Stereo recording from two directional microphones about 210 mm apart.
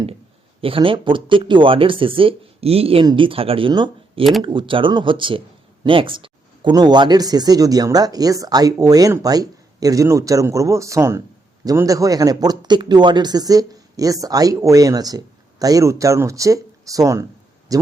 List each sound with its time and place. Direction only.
0.6 s speech: 25° right (ahead or behind)
4.2 s speech: centre (ahead or behind)
4.4 s speech: 25° right (ahead or behind)